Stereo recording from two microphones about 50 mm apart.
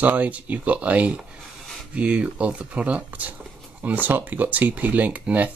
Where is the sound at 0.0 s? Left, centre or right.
Right.